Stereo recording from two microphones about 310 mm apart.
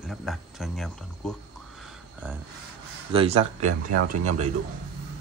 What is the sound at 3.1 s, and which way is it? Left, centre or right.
Speech, centre.